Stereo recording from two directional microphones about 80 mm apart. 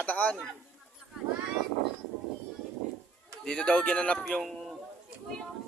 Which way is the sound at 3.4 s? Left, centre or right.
Centre.